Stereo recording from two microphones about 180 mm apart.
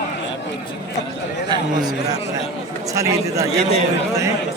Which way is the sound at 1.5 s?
20° right (ahead or behind).